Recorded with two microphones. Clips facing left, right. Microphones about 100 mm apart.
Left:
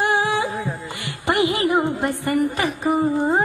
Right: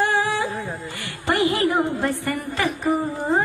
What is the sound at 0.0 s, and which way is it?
Music, 15° left (ahead or behind).